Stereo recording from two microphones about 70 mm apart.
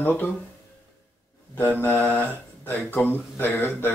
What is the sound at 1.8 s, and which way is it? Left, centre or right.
Speech, left.